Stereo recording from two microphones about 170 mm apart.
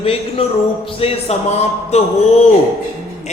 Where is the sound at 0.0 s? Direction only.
35° left (ahead or behind).